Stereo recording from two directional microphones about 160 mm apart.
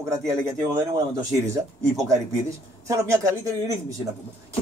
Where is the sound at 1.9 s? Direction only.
20° right (ahead or behind).